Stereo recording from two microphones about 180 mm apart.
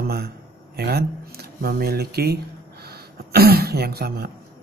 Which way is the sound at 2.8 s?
60° right (ahead or behind).